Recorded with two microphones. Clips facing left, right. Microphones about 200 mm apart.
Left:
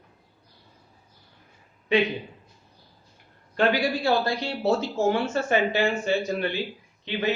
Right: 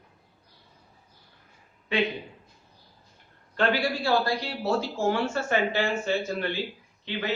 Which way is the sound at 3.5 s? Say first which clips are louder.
Left 3 dB; 20° left (ahead or behind).